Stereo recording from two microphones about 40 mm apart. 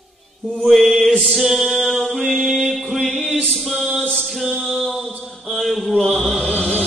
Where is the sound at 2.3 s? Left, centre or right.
Centre.